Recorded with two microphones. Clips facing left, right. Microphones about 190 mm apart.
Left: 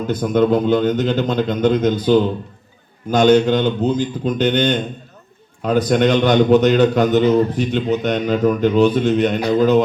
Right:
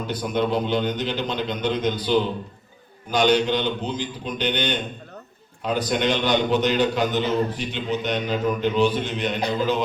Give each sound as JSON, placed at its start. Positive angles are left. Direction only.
{"t": 0.1, "sound": "a man's voice", "side_deg": 50}